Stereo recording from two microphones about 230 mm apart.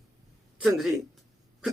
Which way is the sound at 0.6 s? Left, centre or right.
Centre.